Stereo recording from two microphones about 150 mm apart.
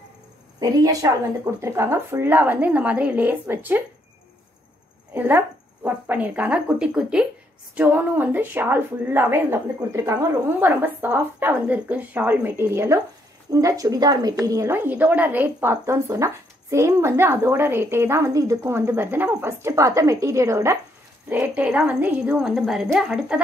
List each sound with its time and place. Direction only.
0.6 s a woman's voice: 20° right (ahead or behind)
5.1 s a woman's voice: 15° right (ahead or behind)